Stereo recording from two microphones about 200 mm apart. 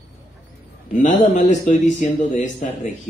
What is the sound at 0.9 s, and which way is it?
Speech, 35° left (ahead or behind).